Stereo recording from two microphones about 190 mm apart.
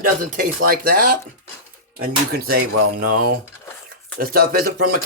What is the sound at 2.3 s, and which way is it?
Speech, 55° right (ahead or behind).